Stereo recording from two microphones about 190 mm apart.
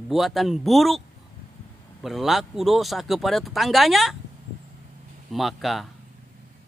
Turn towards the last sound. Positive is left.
turn(degrees=0)  # may be behind; listen again after turning